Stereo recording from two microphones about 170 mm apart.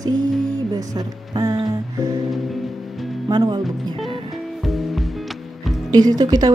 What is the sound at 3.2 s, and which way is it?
Speech, 25° right (ahead or behind).